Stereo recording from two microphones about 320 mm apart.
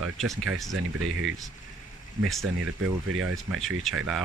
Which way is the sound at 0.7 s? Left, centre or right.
Right.